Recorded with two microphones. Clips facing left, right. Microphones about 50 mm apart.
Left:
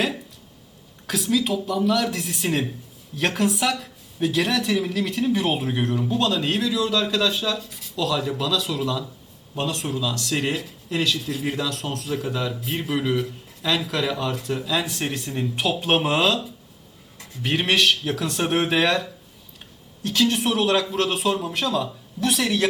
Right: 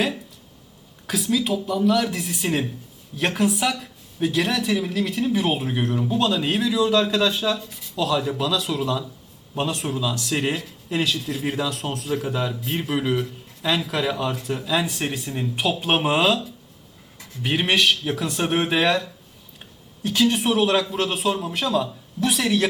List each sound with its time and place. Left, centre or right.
1.0 s a man's voice: centre
11.3 s a man's voice: centre
12.6 s a man's voice: centre